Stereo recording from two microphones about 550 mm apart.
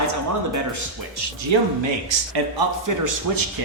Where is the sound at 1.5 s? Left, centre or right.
Right.